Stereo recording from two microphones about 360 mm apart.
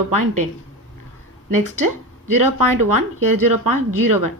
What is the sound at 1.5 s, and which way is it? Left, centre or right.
Speech, right.